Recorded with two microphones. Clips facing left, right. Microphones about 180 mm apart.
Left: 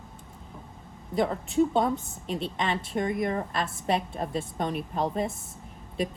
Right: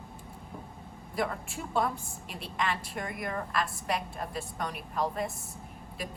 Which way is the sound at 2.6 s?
25° left (ahead or behind).